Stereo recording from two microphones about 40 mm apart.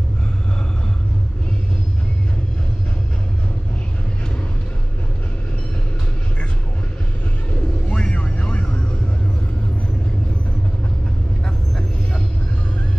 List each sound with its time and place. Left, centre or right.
7.9 s vehicle: left